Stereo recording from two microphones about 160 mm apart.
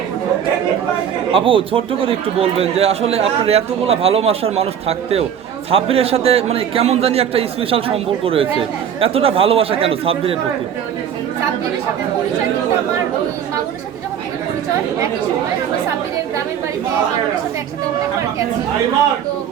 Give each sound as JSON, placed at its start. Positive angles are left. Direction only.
{"t": 1.3, "sound": "a man's voice", "side_deg": -35}